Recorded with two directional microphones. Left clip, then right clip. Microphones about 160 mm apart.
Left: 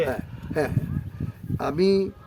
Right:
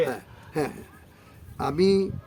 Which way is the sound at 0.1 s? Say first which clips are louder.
Left 3 dB; 15° right (ahead or behind).